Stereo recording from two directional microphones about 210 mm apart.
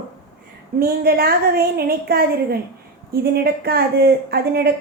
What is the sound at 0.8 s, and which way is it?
A woman's voice, 45° right (ahead or behind).